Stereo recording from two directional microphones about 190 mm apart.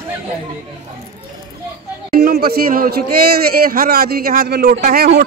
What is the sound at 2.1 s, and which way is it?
A man's voice, 50° right (ahead or behind).